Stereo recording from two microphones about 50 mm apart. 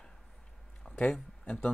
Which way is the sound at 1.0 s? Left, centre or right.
Left.